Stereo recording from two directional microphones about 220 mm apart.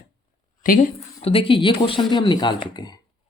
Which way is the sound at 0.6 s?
40° left (ahead or behind).